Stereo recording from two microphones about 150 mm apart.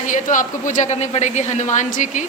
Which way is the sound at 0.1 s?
60° left (ahead or behind).